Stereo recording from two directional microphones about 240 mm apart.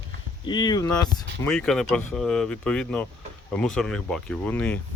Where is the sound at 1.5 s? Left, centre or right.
Centre.